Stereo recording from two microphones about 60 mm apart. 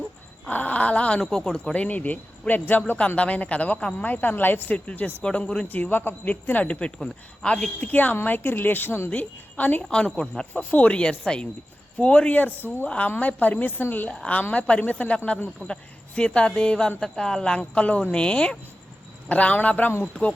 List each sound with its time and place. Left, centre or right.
0.4 s a sound: left
1.2 s a man's voice: centre; by 4.8 s left
4.9 s speech: left
5.6 s a man's voice: left
10.2 s speech: centre
10.5 s a man's voice: left
11.0 s a man's voice: centre
17.6 s a man's voice: left